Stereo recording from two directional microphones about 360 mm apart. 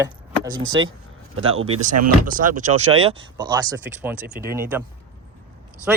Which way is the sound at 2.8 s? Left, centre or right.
Centre.